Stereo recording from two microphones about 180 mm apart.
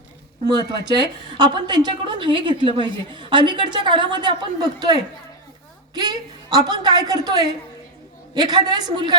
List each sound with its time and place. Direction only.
0.4 s a woman's voice: 25° right (ahead or behind)